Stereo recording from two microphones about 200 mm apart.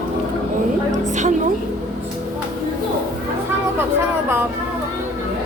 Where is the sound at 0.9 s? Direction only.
40° right (ahead or behind).